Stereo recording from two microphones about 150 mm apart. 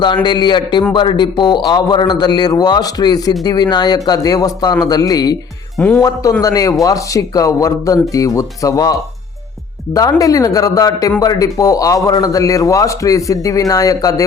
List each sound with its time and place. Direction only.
0.0 s a man's voice: 30° left (ahead or behind)
5.7 s speech: 10° left (ahead or behind)
6.4 s a man's voice: 25° left (ahead or behind)